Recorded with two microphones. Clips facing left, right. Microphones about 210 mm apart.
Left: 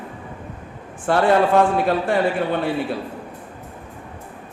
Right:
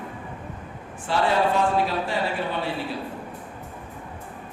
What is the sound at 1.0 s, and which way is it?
Speech, 55° left (ahead or behind).